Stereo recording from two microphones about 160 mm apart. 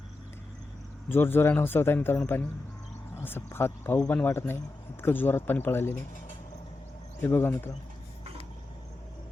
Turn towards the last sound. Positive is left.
turn(degrees=15)  # may be behind; listen again after turning